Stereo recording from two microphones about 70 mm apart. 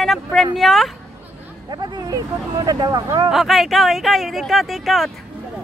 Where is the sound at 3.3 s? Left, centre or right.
Centre.